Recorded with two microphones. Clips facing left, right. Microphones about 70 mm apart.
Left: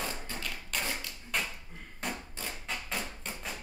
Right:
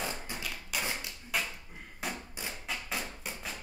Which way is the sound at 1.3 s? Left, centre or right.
Centre.